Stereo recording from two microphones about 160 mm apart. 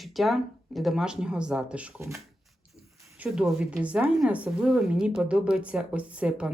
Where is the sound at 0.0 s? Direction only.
Centre (ahead or behind).